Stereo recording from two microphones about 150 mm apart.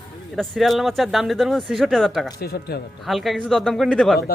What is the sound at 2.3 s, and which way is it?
Speech, 90° left.